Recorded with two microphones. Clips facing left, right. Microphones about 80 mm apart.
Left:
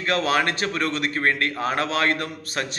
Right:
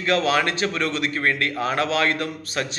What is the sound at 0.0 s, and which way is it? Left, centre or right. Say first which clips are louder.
Speech: right 1 dB; left.